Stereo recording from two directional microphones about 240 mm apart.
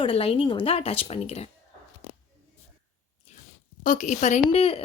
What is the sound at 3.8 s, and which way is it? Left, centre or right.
Speech, left.